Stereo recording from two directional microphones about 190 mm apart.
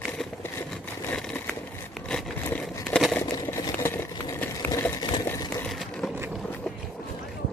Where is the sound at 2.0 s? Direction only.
5° left (ahead or behind).